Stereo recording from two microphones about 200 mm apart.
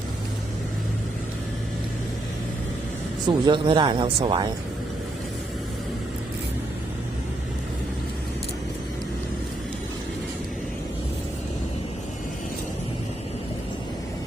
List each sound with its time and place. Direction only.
3.2 s speech: 25° right (ahead or behind)